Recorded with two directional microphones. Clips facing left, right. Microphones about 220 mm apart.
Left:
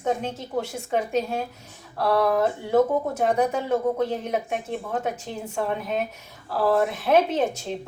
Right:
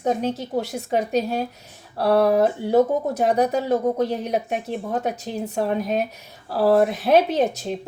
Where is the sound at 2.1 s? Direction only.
35° right (ahead or behind).